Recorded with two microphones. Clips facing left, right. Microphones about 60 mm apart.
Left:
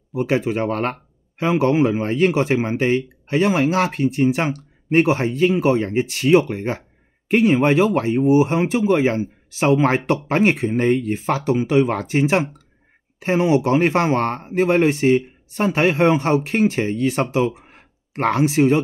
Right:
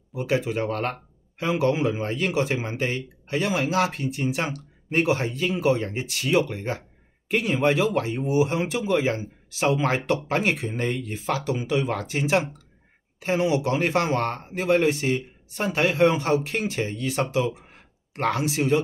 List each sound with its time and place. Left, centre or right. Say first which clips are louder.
0.1 s speech: left 5 dB; left